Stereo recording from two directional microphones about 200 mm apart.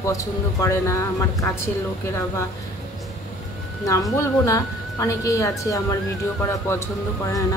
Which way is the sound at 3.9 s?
15° left (ahead or behind).